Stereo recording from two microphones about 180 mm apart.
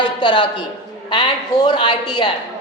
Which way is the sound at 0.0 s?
25° left (ahead or behind).